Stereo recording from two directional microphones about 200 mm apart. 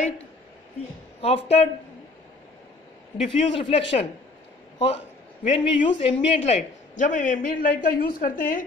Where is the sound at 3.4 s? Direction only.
30° left (ahead or behind).